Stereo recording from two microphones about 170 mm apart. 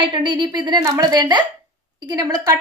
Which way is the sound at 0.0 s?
25° right (ahead or behind).